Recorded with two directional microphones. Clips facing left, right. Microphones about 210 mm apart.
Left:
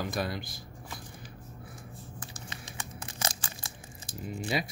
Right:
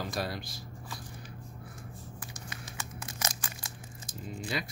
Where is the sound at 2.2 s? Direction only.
30° left (ahead or behind).